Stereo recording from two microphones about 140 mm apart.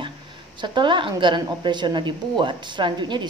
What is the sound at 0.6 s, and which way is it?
A woman's voice, 35° right (ahead or behind).